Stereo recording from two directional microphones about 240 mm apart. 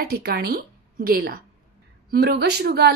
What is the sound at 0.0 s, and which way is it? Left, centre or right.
A woman's voice, right.